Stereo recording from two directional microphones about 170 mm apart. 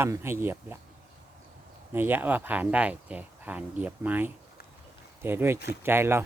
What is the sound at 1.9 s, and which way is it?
Speech, 10° right (ahead or behind).